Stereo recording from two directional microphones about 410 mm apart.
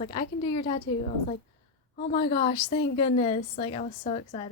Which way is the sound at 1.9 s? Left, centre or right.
Centre.